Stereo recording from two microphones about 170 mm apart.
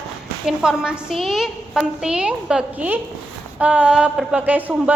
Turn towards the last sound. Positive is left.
turn(degrees=-10)  # may be behind; listen again after turning